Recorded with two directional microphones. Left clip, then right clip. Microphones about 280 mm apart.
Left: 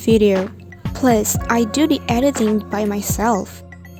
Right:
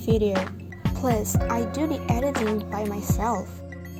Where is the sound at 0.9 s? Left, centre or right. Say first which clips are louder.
Left 9 dB; left.